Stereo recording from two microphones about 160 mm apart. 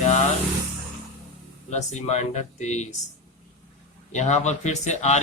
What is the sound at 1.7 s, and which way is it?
Speech, 45° left (ahead or behind).